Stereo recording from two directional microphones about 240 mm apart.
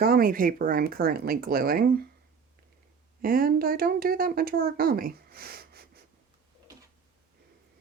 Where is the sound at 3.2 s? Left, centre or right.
Right.